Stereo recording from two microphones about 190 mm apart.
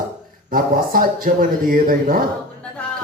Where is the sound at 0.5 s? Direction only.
45° right (ahead or behind).